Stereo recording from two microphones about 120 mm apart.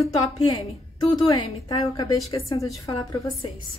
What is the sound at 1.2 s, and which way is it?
A woman's voice, 35° left (ahead or behind).